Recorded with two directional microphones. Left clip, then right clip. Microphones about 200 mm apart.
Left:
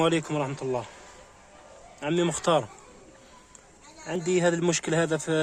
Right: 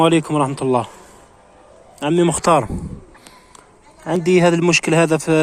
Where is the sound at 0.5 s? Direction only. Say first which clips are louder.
Right 12 dB; 25° right (ahead or behind).